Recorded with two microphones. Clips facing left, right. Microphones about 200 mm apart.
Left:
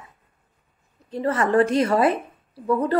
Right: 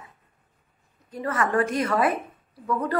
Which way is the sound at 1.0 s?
30° left (ahead or behind).